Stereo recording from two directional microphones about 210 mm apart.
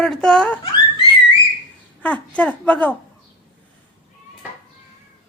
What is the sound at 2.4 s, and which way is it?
Speech, 5° left (ahead or behind).